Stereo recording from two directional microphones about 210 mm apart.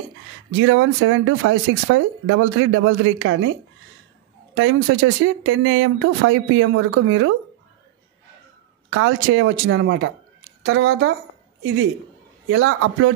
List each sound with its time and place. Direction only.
0.5 s speech: 70° right (ahead or behind)
4.6 s speech: 70° right (ahead or behind)
8.9 s speech: 70° right (ahead or behind)
12.4 s speech: 60° right (ahead or behind)